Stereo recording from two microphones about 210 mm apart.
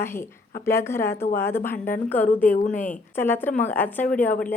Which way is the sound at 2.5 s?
40° left (ahead or behind).